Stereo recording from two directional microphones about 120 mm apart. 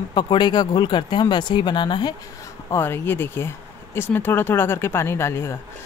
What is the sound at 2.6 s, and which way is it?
Speech, 20° left (ahead or behind).